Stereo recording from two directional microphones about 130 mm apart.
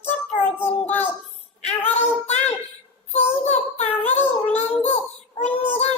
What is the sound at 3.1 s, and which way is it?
Child singing, 55° left (ahead or behind).